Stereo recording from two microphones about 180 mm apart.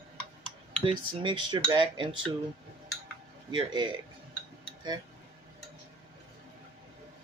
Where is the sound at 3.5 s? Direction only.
25° right (ahead or behind).